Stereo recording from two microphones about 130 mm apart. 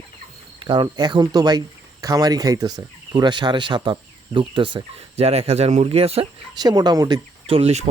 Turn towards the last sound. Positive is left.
turn(degrees=-55)  # may be behind; listen again after turning